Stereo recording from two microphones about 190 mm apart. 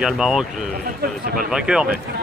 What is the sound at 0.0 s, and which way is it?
Speech, centre (ahead or behind).